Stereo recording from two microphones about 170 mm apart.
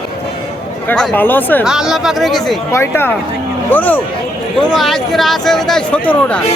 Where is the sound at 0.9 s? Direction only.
10° left (ahead or behind).